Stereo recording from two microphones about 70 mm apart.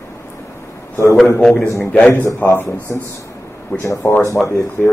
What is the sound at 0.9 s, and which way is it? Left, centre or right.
Speech, left.